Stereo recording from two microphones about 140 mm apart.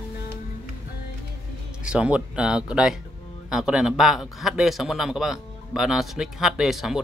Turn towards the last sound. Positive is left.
turn(degrees=0)  # may be behind; listen again after turning